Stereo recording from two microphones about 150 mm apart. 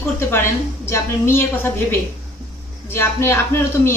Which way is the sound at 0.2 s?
15° left (ahead or behind).